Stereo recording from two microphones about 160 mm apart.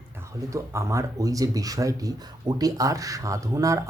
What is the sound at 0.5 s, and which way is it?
Speech, 15° right (ahead or behind).